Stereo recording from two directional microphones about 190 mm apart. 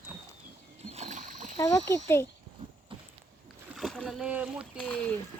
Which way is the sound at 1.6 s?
15° left (ahead or behind).